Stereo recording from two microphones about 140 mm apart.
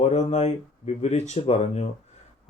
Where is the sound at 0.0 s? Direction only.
55° left (ahead or behind).